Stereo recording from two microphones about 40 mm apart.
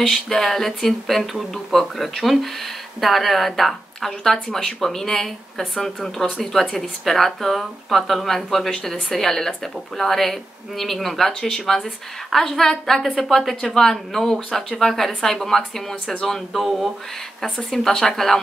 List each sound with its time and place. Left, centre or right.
0.0 s speech: centre